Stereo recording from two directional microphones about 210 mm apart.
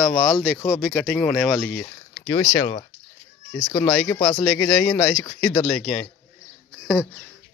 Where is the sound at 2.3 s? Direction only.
20° left (ahead or behind).